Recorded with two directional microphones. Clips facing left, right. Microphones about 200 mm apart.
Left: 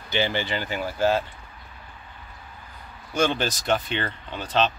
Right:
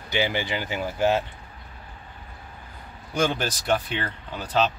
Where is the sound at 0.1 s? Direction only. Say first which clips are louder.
Even; 15° right (ahead or behind).